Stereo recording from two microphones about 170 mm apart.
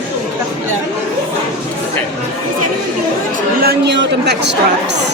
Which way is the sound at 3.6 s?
85° right.